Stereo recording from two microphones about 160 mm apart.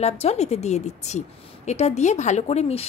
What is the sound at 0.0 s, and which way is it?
Speech, 40° left (ahead or behind).